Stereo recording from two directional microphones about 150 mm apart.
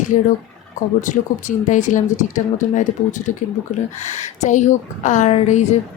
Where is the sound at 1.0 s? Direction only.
55° left (ahead or behind).